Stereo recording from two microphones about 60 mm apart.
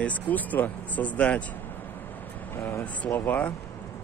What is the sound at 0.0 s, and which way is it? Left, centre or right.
Speech, left.